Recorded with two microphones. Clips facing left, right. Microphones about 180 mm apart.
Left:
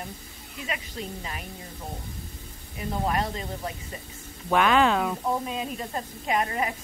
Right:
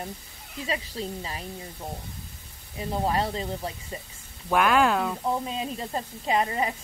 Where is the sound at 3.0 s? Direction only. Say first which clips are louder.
Right 2 dB; 25° right (ahead or behind).